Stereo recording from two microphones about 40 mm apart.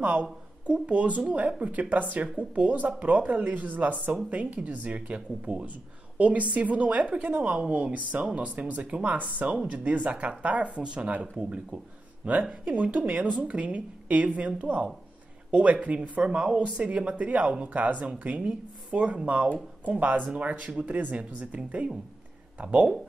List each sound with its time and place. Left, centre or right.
0.0 s a woman's voice: right
9.0 s speech: right
9.6 s speech: right
9.9 s speech: right
10.8 s speech: right
11.1 s speech: right